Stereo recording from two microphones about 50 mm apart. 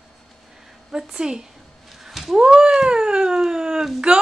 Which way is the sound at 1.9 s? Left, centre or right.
Centre.